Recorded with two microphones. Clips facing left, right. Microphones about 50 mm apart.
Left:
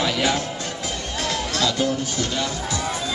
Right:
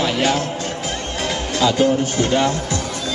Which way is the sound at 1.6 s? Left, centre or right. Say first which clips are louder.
Right 8 dB; right.